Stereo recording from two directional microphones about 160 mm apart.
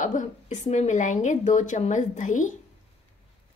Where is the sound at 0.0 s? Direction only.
50° left (ahead or behind).